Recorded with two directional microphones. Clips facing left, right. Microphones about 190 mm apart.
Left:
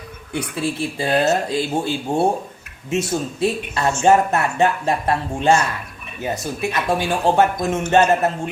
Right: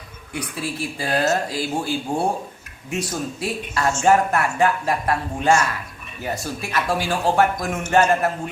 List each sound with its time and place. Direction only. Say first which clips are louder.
0.3 s speech: left 5 dB; 25° left (ahead or behind)